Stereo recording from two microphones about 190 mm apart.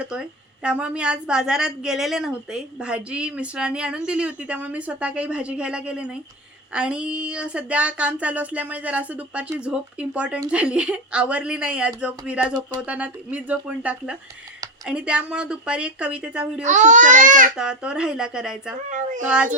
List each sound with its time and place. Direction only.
0.0 s a woman's voice: 5° right (ahead or behind)
16.6 s speech: 40° right (ahead or behind)
17.6 s a woman's voice: 5° right (ahead or behind)
18.9 s speech: 40° right (ahead or behind)